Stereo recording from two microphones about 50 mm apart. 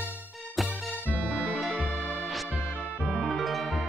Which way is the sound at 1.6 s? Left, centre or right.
Centre.